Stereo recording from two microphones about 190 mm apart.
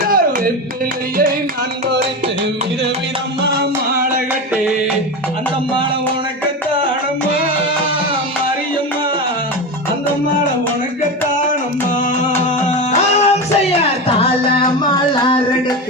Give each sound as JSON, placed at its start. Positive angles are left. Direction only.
{"t": 0.0, "sound": "music", "side_deg": -50}
{"t": 13.2, "sound": "music", "side_deg": 30}